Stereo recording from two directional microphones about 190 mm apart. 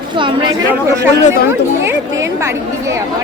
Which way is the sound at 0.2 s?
25° right (ahead or behind).